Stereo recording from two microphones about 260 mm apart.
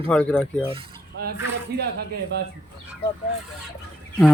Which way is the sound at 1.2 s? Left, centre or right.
Right.